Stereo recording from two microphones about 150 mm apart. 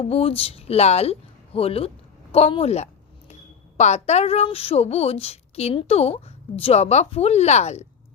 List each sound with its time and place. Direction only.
0.0 s speech: 40° left (ahead or behind)
2.3 s a sound: 40° left (ahead or behind)
3.8 s a woman's voice: 50° left (ahead or behind)